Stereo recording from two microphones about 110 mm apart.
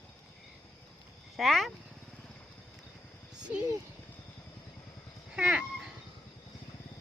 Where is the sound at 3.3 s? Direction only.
10° right (ahead or behind).